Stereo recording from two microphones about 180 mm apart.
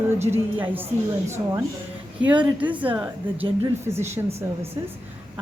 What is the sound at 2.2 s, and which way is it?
Speech, 5° right (ahead or behind).